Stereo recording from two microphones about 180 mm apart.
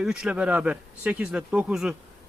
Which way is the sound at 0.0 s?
5° right (ahead or behind).